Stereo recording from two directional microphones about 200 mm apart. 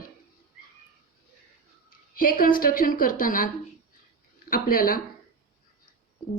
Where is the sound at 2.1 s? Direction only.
45° left (ahead or behind).